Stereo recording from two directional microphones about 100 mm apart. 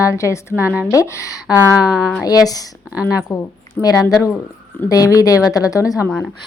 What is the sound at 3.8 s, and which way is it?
A woman's voice, 25° left (ahead or behind).